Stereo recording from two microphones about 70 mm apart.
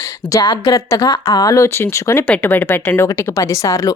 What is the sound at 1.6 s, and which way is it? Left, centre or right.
A woman's voice, left.